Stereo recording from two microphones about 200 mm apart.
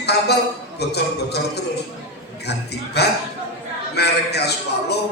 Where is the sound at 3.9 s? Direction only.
55° left (ahead or behind).